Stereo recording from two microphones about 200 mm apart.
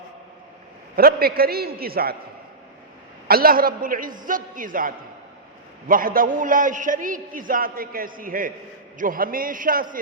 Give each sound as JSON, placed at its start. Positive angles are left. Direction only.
{"t": 0.9, "sound": "a man's voice", "side_deg": -50}
{"t": 3.2, "sound": "a man's voice", "side_deg": -50}